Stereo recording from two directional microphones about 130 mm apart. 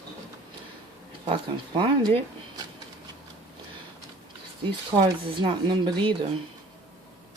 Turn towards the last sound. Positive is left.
turn(degrees=-35)  # may be behind; listen again after turning